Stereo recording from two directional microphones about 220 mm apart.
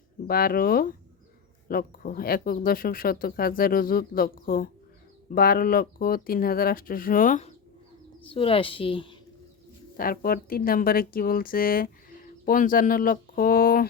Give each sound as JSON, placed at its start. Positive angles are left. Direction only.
{"t": 0.3, "sound": "a woman's voice", "side_deg": 45}
{"t": 10.0, "sound": "speech", "side_deg": 40}